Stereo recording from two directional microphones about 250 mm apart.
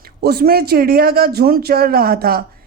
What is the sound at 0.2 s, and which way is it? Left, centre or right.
Speech, right.